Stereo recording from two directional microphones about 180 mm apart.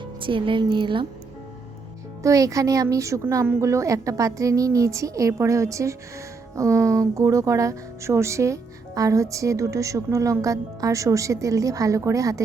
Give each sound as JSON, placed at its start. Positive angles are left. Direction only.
{"t": 0.0, "sound": "speech", "side_deg": -30}
{"t": 2.2, "sound": "speech", "side_deg": -20}